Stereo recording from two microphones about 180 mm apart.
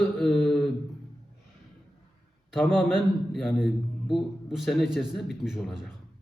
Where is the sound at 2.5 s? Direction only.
Centre (ahead or behind).